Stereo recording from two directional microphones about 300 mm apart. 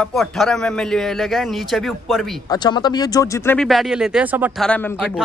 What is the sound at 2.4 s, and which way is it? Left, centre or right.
Speech, centre.